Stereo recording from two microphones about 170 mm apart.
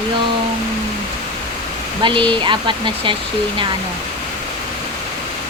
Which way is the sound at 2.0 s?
30° right (ahead or behind).